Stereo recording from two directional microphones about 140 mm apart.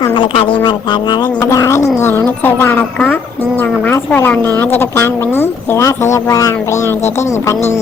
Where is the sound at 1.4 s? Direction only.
20° left (ahead or behind).